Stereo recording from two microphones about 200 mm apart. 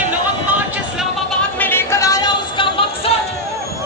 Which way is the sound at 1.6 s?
10° left (ahead or behind).